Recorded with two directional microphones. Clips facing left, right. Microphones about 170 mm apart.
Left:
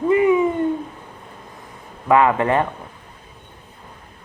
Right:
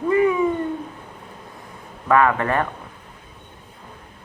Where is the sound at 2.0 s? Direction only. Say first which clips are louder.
Left 2 dB; 20° left (ahead or behind).